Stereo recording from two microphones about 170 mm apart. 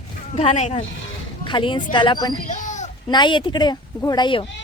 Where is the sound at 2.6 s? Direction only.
45° left (ahead or behind).